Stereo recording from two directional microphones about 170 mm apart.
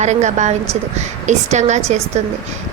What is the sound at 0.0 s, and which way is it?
A woman's voice, 45° right (ahead or behind).